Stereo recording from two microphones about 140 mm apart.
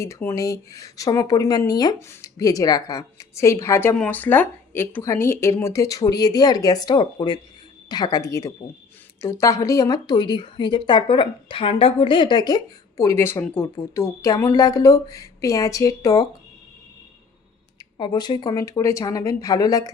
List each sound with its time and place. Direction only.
0.0 s a woman's voice: 20° left (ahead or behind)
17.9 s speech: 30° left (ahead or behind)